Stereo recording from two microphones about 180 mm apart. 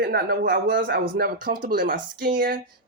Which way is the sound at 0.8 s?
55° right (ahead or behind).